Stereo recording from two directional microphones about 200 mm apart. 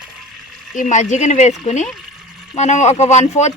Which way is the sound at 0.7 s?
40° left (ahead or behind).